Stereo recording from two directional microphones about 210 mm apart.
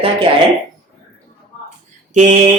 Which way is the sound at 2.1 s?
35° right (ahead or behind).